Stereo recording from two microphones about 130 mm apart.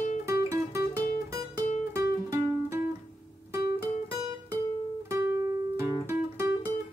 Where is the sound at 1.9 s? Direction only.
20° right (ahead or behind).